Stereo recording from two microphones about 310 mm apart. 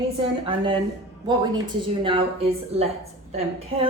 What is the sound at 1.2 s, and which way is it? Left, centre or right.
Speech, centre.